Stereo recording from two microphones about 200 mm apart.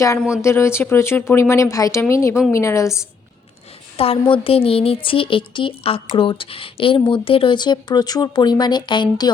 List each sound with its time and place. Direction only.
0.4 s speech: 15° left (ahead or behind)
3.9 s speech: 30° left (ahead or behind)